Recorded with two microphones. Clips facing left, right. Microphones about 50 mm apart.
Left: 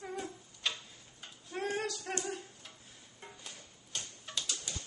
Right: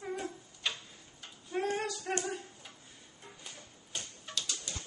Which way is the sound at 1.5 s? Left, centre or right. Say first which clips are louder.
Right 2 dB; centre.